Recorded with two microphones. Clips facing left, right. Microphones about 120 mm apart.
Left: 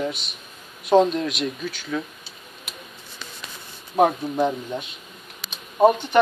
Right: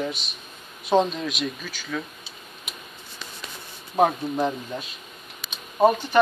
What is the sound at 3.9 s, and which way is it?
Speech, centre (ahead or behind).